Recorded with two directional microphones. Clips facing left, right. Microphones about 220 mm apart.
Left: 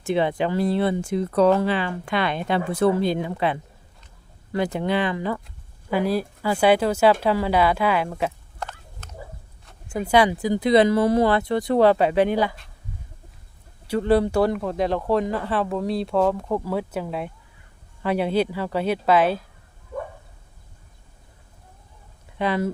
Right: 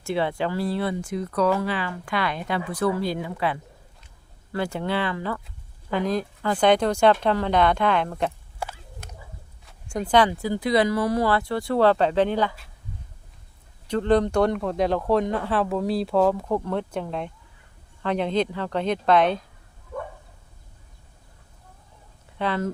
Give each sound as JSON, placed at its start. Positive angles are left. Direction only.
{"t": 0.0, "sound": "speech", "side_deg": 20}
{"t": 8.5, "sound": "a sound", "side_deg": -10}
{"t": 9.6, "sound": "speech", "side_deg": 5}
{"t": 13.8, "sound": "speech", "side_deg": 10}
{"t": 22.4, "sound": "speech", "side_deg": 10}